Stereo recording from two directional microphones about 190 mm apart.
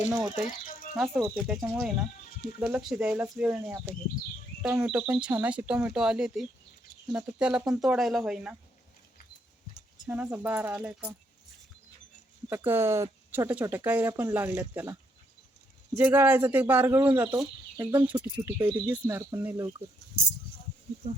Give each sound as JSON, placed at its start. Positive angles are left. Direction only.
{"t": 0.1, "sound": "speech", "side_deg": -10}
{"t": 0.9, "sound": "speech", "side_deg": 0}
{"t": 10.1, "sound": "speech", "side_deg": -10}
{"t": 12.5, "sound": "speech", "side_deg": -10}
{"t": 16.0, "sound": "speech", "side_deg": -10}
{"t": 21.0, "sound": "speech", "side_deg": -30}